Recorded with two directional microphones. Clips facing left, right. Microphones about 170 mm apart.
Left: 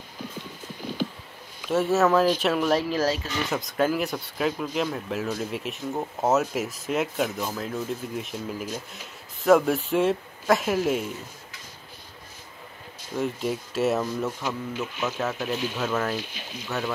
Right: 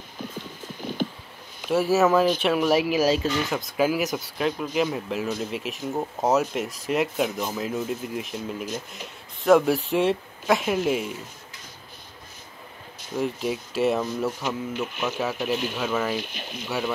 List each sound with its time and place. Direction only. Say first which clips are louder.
1.7 s speech: right 1 dB; centre (ahead or behind)
3.4 s speech: right 1 dB; centre (ahead or behind)
13.1 s speech: right 1 dB; centre (ahead or behind)
16.2 s speech: right 2 dB; 65° right (ahead or behind)
16.6 s speech: right 2 dB; 10° right (ahead or behind)